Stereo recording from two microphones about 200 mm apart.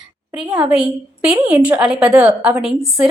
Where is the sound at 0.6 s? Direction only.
5° right (ahead or behind).